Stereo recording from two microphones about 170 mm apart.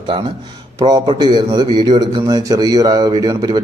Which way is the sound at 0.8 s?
25° right (ahead or behind).